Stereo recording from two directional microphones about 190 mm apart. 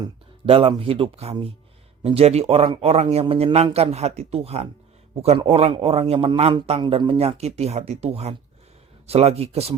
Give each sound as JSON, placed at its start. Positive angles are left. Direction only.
{"t": 0.0, "sound": "a man's voice", "side_deg": -30}